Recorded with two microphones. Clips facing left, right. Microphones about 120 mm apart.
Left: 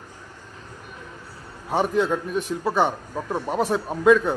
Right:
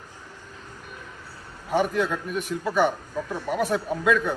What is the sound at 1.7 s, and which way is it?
A man's voice, 25° left (ahead or behind).